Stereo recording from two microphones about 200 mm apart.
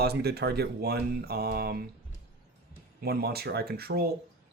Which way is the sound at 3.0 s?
50° right (ahead or behind).